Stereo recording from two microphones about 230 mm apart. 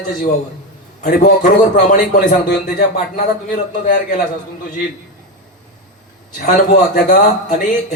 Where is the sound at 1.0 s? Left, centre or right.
Left.